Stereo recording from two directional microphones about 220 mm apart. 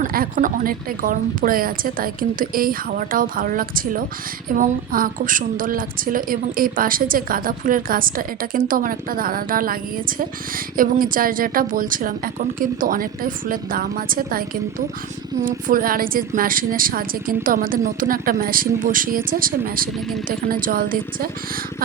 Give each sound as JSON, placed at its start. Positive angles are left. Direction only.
{"t": 0.0, "sound": "a woman's voice", "side_deg": -40}